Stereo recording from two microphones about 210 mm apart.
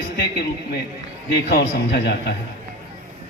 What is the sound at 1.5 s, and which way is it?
Speech, 55° left (ahead or behind).